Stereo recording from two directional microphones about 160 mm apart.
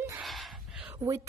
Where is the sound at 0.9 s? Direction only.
20° right (ahead or behind).